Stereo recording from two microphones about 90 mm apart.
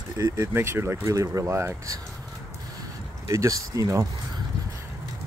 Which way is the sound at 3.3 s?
35° right (ahead or behind).